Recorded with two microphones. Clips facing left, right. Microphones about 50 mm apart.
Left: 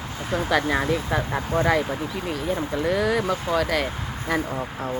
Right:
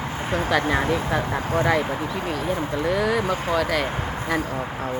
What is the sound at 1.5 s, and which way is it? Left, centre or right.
Speech, right.